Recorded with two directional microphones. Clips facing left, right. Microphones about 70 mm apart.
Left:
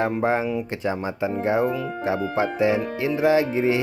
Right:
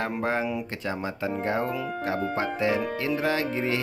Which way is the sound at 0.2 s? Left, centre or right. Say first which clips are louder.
Left 5 dB; left.